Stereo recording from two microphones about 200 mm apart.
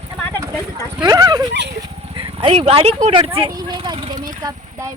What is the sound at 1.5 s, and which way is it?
Speech, 60° right (ahead or behind).